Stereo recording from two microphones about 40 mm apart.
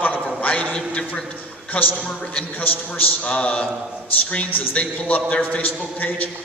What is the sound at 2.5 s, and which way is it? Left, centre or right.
Speech, left.